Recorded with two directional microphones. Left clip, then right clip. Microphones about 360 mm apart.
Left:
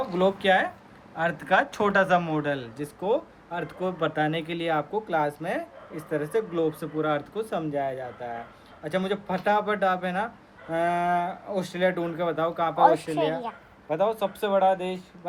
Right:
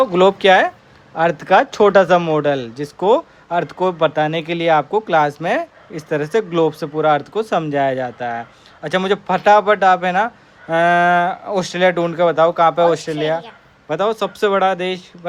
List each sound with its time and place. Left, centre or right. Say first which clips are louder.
0.2 s speech: right 9 dB; centre
13.1 s speech: right 6 dB; centre
13.9 s speech: right 7 dB; centre